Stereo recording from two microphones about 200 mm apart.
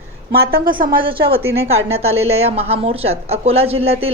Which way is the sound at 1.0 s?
25° right (ahead or behind).